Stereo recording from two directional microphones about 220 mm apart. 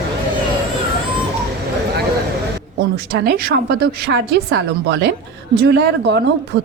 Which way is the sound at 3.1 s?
45° right (ahead or behind).